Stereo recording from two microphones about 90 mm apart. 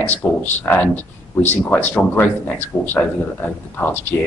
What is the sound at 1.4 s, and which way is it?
A man's voice, 20° left (ahead or behind).